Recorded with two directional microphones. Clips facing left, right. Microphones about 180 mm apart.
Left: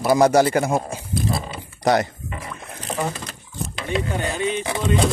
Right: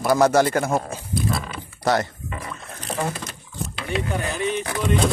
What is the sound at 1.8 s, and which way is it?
Speech, 15° left (ahead or behind).